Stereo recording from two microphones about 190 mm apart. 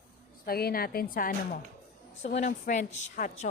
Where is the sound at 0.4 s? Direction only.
50° left (ahead or behind).